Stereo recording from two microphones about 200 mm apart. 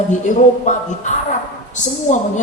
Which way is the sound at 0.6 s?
40° left (ahead or behind).